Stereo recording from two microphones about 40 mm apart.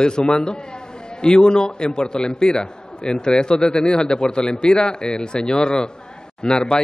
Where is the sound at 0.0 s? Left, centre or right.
Left.